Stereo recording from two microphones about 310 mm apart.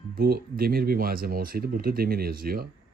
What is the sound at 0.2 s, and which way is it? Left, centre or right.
Speech, right.